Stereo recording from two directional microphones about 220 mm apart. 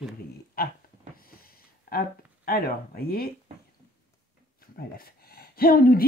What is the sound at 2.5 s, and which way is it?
Speech, 40° left (ahead or behind).